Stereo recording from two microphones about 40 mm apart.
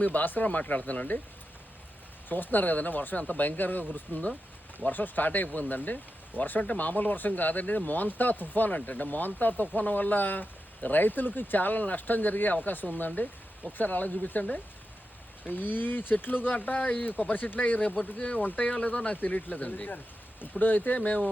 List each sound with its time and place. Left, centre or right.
0.0 s speech: left
2.3 s speech: left
15.4 s speech: left
18.0 s speech: left